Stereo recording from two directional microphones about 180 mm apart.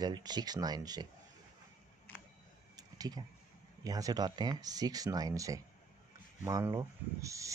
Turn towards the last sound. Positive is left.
turn(degrees=-15)  # may be behind; listen again after turning